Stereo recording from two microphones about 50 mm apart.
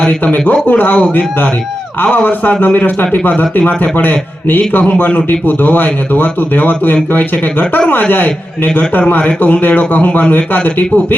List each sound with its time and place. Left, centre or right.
0.0 s a man's voice: left
8.1 s a man's voice: left